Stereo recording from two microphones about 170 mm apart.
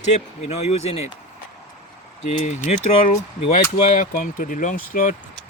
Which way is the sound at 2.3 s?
40° left (ahead or behind).